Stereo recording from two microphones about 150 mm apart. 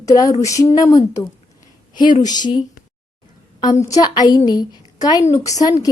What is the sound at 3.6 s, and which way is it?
A woman's voice, 25° left (ahead or behind).